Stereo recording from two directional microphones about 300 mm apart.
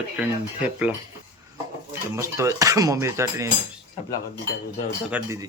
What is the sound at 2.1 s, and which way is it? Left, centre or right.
Speech, centre.